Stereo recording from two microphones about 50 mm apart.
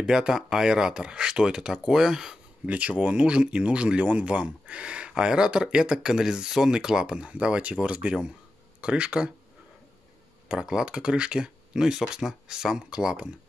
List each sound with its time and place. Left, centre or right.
0.0 s speech: centre
2.6 s speech: right
10.5 s speech: centre